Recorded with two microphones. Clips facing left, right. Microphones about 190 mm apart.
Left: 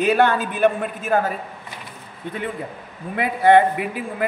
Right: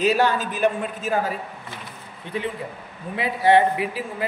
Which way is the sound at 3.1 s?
55° left (ahead or behind).